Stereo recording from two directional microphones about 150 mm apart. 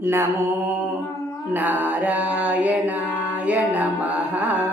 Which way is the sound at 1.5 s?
10° right (ahead or behind).